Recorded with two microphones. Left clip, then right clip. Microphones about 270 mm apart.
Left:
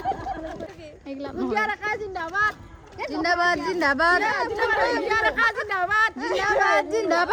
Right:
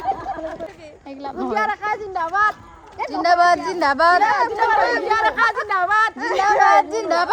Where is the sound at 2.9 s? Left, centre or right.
Centre.